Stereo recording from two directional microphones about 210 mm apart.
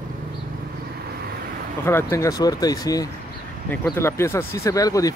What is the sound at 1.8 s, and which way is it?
Speech, 10° left (ahead or behind).